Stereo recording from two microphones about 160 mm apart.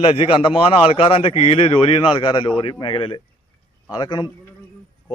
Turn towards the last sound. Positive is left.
turn(degrees=30)  # may be behind; listen again after turning